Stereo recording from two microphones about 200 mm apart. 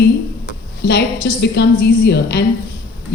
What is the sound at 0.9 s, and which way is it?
A woman's voice, 60° left (ahead or behind).